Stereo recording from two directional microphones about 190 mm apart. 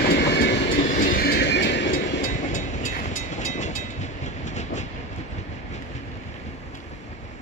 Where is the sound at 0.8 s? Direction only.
45° left (ahead or behind); by 1.9 s 65° left (ahead or behind).